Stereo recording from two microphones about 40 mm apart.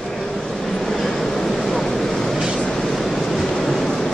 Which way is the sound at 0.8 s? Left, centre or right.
Centre.